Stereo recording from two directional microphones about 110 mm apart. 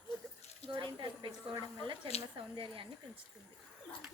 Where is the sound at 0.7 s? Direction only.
45° right (ahead or behind).